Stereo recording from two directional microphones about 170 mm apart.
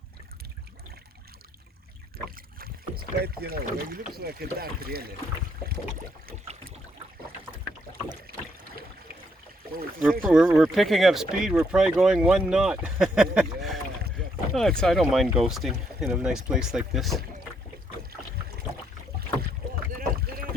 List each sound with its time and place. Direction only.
2.6 s speech: 60° right (ahead or behind)
10.0 s speech: centre (ahead or behind)
20.0 s rowboat: 55° right (ahead or behind)